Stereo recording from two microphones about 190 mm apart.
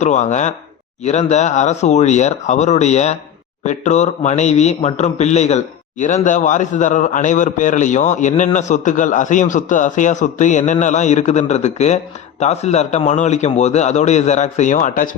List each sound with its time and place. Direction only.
0.0 s a man's voice: 40° left (ahead or behind)